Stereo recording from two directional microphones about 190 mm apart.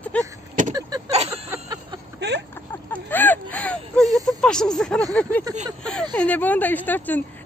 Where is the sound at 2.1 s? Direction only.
65° right (ahead or behind).